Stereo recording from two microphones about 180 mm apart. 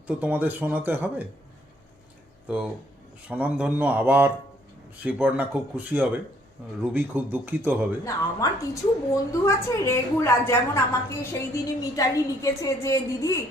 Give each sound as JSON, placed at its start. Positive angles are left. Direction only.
{"t": 0.1, "sound": "speech", "side_deg": -10}
{"t": 3.2, "sound": "speech", "side_deg": -5}
{"t": 8.0, "sound": "a woman's voice", "side_deg": 20}